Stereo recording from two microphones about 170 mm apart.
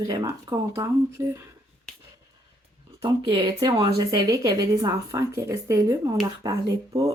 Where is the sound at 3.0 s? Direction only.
30° right (ahead or behind).